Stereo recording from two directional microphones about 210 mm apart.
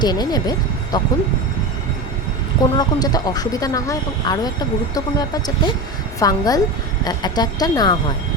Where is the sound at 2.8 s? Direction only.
20° left (ahead or behind).